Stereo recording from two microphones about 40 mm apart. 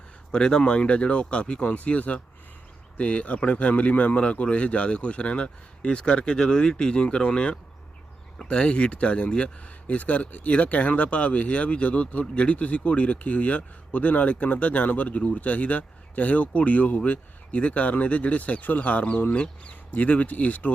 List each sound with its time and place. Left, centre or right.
0.3 s speech: left
8.6 s speech: left